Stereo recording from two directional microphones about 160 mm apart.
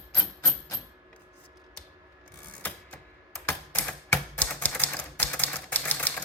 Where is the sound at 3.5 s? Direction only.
10° left (ahead or behind).